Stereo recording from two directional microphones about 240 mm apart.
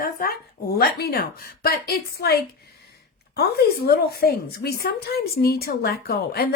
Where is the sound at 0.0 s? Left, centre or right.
Left.